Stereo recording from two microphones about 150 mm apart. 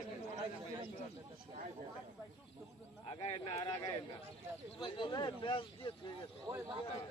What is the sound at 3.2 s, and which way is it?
Speech, 40° left (ahead or behind).